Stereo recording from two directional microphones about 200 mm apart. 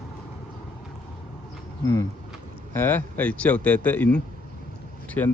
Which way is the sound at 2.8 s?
10° left (ahead or behind).